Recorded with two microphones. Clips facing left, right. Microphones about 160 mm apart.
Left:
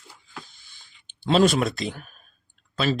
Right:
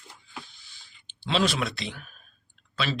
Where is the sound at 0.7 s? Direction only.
50° left (ahead or behind).